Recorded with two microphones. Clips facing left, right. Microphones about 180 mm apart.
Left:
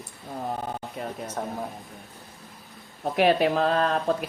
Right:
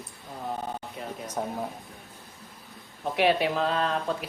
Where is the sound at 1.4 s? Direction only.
10° right (ahead or behind).